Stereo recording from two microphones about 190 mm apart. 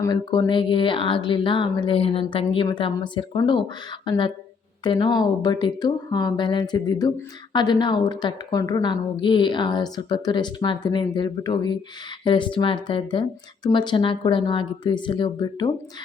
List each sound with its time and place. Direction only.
0.0 s a woman's voice: 20° left (ahead or behind)